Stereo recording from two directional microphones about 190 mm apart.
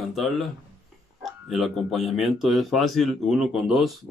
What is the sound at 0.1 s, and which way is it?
Speech, centre (ahead or behind).